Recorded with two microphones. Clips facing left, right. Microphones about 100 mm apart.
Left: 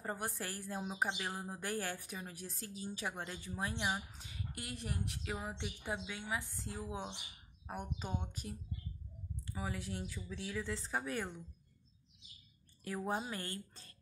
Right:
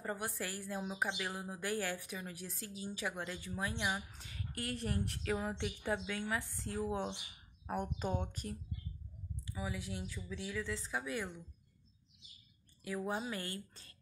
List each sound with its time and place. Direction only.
0.0 s speech: 30° left (ahead or behind); by 8.5 s 15° left (ahead or behind)
9.4 s speech: 45° left (ahead or behind)
12.8 s speech: 40° left (ahead or behind)